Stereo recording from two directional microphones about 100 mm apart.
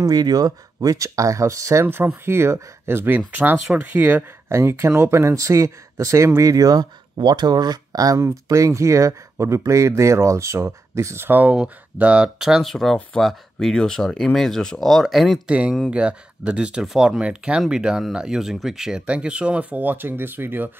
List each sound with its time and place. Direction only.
0.0 s speech: 40° right (ahead or behind); by 15.4 s centre (ahead or behind)
15.4 s speech: 10° right (ahead or behind)